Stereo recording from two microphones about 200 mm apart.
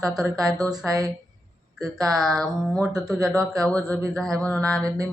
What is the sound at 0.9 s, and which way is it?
Speech, 15° right (ahead or behind).